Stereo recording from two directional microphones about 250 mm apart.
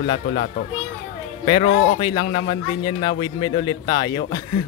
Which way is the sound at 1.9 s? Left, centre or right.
Centre.